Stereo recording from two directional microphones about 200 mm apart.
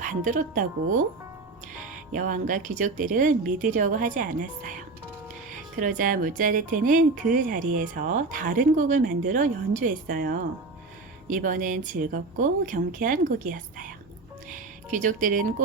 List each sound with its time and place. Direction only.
0.0 s speech: 40° right (ahead or behind)
2.1 s speech: 40° right (ahead or behind)
5.7 s speech: 40° right (ahead or behind)
14.8 s speech: 40° right (ahead or behind)